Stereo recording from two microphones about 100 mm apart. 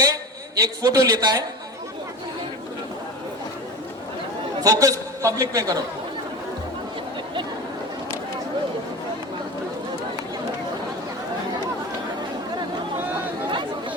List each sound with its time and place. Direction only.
0.0 s a man's voice: 30° right (ahead or behind)
4.6 s a man's voice: 35° right (ahead or behind)